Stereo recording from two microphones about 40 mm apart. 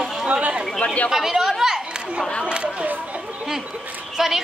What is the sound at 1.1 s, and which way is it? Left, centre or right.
Chatter, centre.